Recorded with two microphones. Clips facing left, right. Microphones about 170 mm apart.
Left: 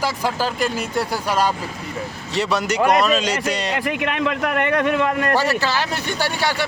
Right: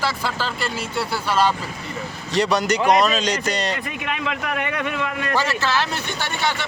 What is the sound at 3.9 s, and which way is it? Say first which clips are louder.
A man's voice: left 5 dB; 60° left (ahead or behind).